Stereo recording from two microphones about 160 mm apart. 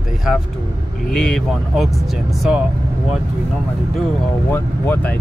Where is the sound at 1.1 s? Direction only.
5° left (ahead or behind).